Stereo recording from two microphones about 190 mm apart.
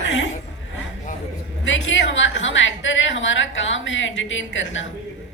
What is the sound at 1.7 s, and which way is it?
A woman's voice, 80° left.